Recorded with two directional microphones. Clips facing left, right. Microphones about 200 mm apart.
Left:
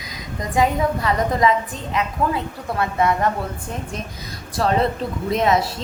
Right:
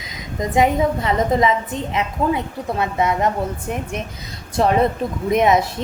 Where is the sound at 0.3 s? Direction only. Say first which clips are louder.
Right 3 dB; 20° right (ahead or behind).